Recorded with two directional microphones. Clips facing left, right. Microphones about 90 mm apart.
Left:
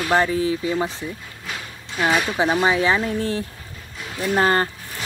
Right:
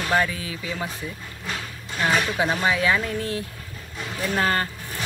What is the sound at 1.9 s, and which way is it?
Speech, 5° left (ahead or behind).